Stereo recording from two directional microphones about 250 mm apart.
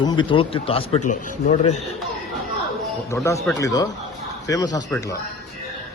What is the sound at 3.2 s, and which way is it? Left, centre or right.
A man's voice, centre.